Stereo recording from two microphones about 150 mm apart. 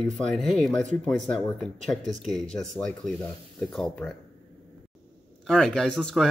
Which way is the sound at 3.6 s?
5° left (ahead or behind).